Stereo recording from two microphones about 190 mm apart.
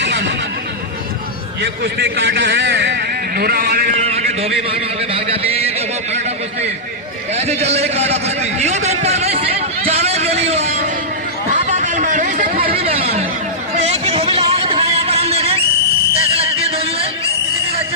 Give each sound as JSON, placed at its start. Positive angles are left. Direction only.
{"t": 0.0, "sound": "neigh", "side_deg": -65}
{"t": 1.6, "sound": "a man's voice", "side_deg": -60}
{"t": 4.0, "sound": "a man's voice", "side_deg": -35}
{"t": 7.3, "sound": "a man's voice", "side_deg": -35}
{"t": 11.6, "sound": "a sound", "side_deg": -40}
{"t": 12.6, "sound": "speech", "side_deg": -30}
{"t": 13.7, "sound": "a sound", "side_deg": -35}
{"t": 16.1, "sound": "music", "side_deg": -30}